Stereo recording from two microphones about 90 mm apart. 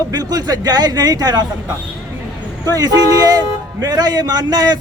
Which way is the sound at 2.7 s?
45° right (ahead or behind).